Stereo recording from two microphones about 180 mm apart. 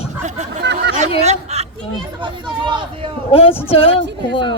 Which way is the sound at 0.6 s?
70° right (ahead or behind).